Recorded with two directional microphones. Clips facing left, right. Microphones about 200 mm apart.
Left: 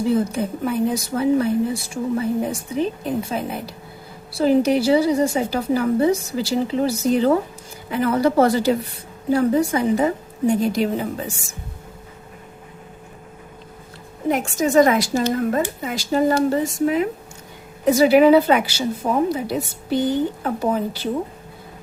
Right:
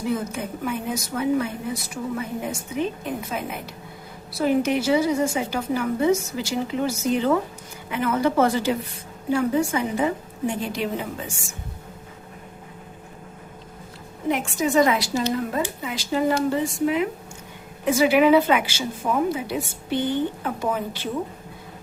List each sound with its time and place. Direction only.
0.1 s a woman's voice: 35° left (ahead or behind)
14.3 s a woman's voice: 45° left (ahead or behind)